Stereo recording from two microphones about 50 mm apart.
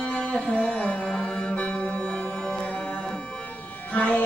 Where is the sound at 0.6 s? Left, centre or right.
Left.